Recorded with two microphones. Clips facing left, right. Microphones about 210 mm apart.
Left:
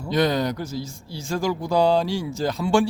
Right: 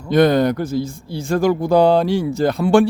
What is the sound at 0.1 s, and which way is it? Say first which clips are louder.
Speech: right 8 dB; 55° right (ahead or behind).